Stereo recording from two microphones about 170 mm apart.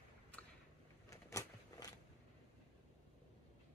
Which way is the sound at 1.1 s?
20° left (ahead or behind).